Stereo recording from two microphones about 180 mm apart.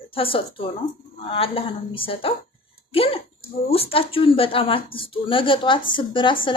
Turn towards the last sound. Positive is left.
turn(degrees=30)  # may be behind; listen again after turning